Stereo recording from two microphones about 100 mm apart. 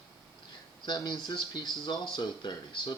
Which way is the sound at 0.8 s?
50° left (ahead or behind).